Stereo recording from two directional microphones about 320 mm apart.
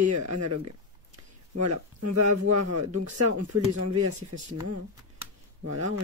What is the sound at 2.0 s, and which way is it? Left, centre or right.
Speech, right.